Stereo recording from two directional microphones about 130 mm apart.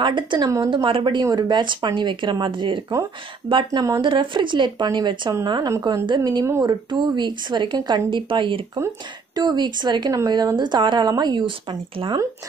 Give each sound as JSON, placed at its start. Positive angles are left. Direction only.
{"t": 0.0, "sound": "speech", "side_deg": -40}
{"t": 6.4, "sound": "speech", "side_deg": -20}
{"t": 6.7, "sound": "speech", "side_deg": -35}